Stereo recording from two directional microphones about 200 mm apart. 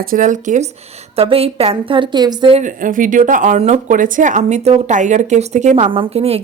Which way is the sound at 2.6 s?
40° right (ahead or behind).